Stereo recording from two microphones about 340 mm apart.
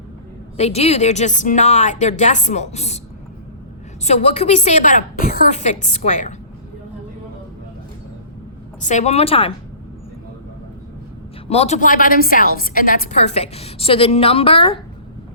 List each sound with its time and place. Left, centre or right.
0.5 s a woman's voice: centre
4.0 s a woman's voice: centre
8.8 s a woman's voice: left
11.4 s a woman's voice: centre